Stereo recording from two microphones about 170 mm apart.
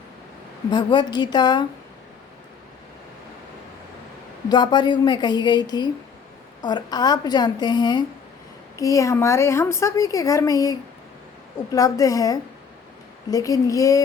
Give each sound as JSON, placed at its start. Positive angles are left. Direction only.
{"t": 0.7, "sound": "a woman's voice", "side_deg": 25}
{"t": 4.4, "sound": "a woman's voice", "side_deg": 25}